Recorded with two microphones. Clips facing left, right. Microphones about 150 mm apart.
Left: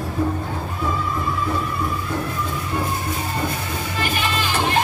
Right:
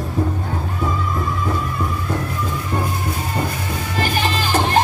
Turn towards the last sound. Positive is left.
turn(degrees=-40)  # may be behind; listen again after turning